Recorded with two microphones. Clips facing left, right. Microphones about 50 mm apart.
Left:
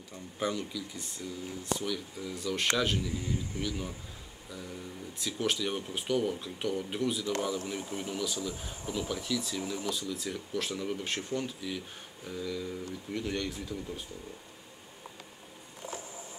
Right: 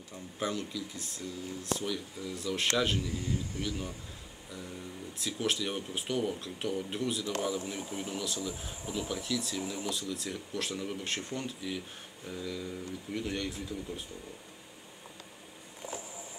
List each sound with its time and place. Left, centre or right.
0.1 s speech: centre
3.2 s speech: centre
3.6 s speech: centre